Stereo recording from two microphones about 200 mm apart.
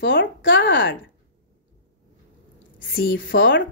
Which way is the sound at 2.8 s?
50° left (ahead or behind).